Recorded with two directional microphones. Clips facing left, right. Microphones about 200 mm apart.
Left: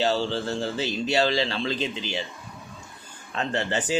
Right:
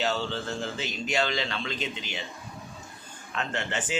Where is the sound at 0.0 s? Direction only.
30° left (ahead or behind).